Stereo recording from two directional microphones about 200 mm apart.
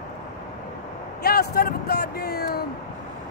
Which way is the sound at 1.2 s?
50° left (ahead or behind).